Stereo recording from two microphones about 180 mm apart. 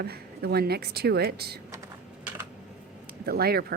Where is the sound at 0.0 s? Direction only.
60° right (ahead or behind).